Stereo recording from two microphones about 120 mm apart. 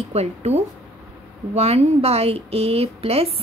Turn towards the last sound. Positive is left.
turn(degrees=-55)  # may be behind; listen again after turning